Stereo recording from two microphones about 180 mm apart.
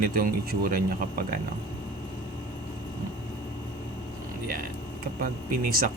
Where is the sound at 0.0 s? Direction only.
50° right (ahead or behind).